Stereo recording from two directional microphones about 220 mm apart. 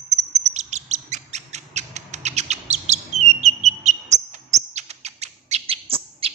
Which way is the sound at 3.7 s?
30° right (ahead or behind).